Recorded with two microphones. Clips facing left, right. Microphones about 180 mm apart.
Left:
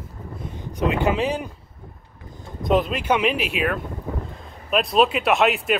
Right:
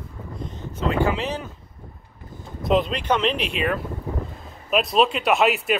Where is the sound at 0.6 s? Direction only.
15° left (ahead or behind).